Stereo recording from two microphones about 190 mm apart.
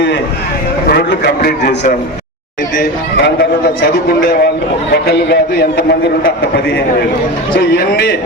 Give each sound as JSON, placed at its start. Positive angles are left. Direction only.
{"t": 0.9, "sound": "a man's voice", "side_deg": 55}
{"t": 2.7, "sound": "a man's voice", "side_deg": 60}